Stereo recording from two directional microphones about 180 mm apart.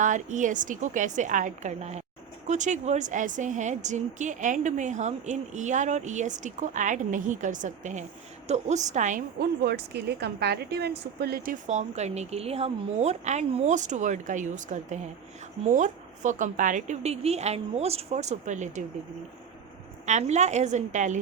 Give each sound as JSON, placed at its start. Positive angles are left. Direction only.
{"t": 0.0, "sound": "a woman's voice", "side_deg": -45}
{"t": 9.6, "sound": "a woman's voice", "side_deg": -65}
{"t": 20.1, "sound": "a woman's voice", "side_deg": -40}